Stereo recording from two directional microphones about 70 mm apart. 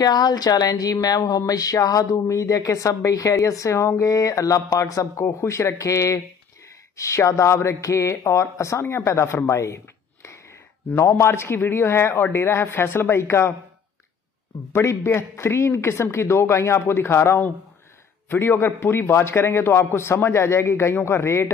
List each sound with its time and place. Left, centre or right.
0.0 s speech: left
11.0 s a man's voice: left
14.7 s a man's voice: left